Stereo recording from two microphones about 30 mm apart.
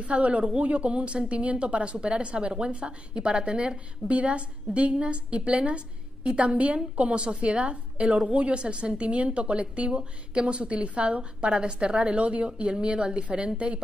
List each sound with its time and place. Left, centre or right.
0.0 s a woman's voice: right